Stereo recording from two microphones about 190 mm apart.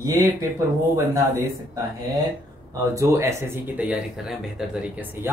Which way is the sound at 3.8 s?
5° right (ahead or behind).